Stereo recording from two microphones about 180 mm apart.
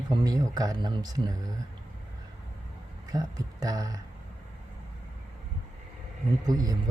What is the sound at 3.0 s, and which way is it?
Speech, 20° right (ahead or behind).